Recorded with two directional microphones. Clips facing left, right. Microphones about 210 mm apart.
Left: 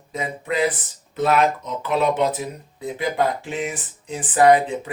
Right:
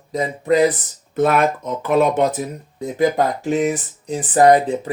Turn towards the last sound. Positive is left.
turn(degrees=-40)  # may be behind; listen again after turning